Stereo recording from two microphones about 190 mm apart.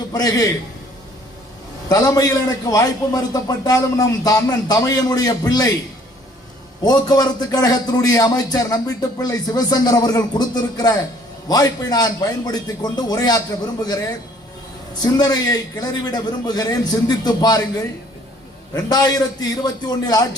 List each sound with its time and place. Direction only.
0.1 s a man's voice: 20° left (ahead or behind)
1.9 s a man's voice: 20° left (ahead or behind)
6.8 s a man's voice: 20° left (ahead or behind)
15.0 s a man's voice: 20° left (ahead or behind)
18.7 s a man's voice: 20° left (ahead or behind)